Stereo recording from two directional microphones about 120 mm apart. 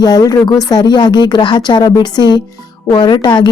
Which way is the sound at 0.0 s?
35° left (ahead or behind).